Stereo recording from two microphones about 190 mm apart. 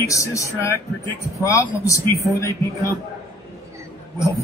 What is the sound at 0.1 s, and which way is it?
A man's voice, 15° left (ahead or behind).